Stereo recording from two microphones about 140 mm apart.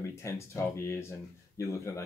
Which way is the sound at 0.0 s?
20° left (ahead or behind).